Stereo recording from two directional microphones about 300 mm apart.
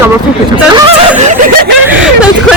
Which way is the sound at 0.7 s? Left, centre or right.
Right.